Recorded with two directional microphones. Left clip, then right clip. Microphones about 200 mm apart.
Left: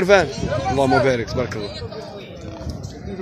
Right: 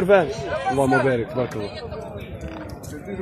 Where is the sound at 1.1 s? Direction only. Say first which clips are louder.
Left 2 dB; 5° left (ahead or behind).